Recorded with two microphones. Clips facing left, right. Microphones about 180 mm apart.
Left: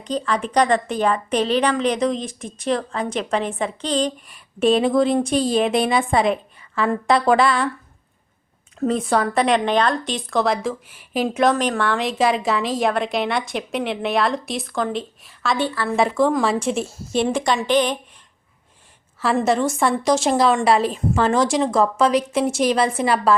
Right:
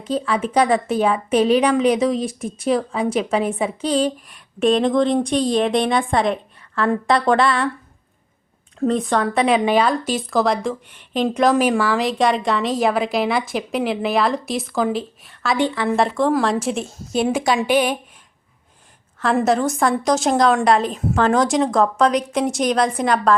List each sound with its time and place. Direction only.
0.0 s speech: 5° right (ahead or behind)
8.8 s speech: 5° left (ahead or behind)
15.5 s a woman's voice: 20° right (ahead or behind)
16.0 s a woman's voice: centre (ahead or behind)
19.4 s speech: centre (ahead or behind)